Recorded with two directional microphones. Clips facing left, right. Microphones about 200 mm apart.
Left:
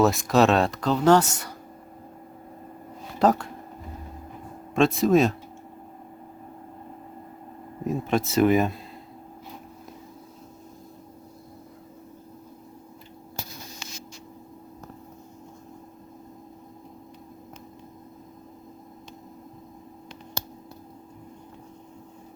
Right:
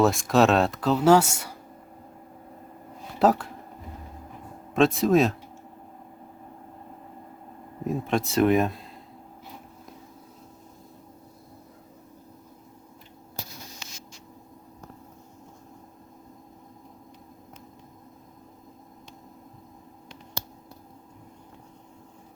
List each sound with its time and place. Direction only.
0.0 s speech: centre (ahead or behind)
3.2 s speech: 5° right (ahead or behind)
4.7 s speech: centre (ahead or behind)
7.9 s speech: centre (ahead or behind)